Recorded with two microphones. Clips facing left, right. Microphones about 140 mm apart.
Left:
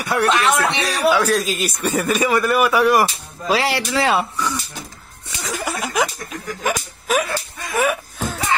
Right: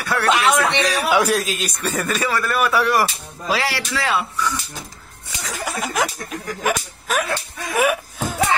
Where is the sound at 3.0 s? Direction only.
25° left (ahead or behind).